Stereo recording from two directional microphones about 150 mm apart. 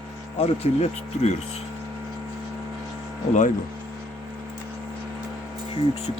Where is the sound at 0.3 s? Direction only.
40° left (ahead or behind).